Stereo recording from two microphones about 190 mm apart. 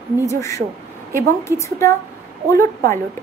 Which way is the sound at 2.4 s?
15° left (ahead or behind).